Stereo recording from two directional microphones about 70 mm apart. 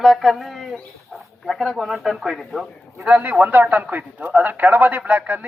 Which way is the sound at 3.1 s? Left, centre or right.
Right.